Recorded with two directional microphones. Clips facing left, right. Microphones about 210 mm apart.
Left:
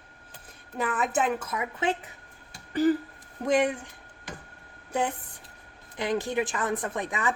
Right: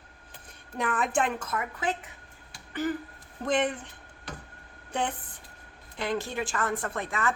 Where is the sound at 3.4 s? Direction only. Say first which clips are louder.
Left 3 dB; 10° left (ahead or behind).